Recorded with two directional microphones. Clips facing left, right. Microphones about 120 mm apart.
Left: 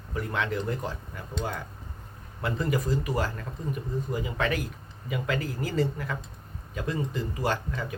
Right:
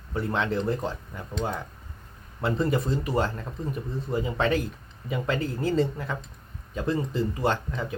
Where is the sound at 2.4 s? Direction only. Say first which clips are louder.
Right 3 dB; 30° right (ahead or behind).